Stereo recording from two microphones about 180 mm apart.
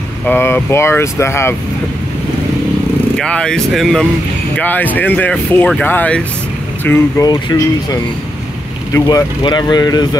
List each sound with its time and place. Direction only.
0.3 s speech: 15° left (ahead or behind)
3.2 s speech: 5° left (ahead or behind)
7.2 s speech: 20° left (ahead or behind)